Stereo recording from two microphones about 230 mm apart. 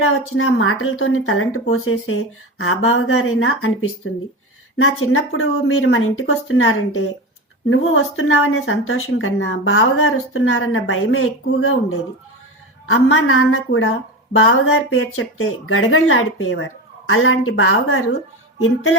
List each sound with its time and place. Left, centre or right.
0.0 s a woman's voice: left